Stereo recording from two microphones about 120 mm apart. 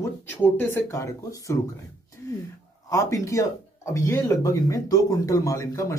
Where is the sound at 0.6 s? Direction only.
20° left (ahead or behind).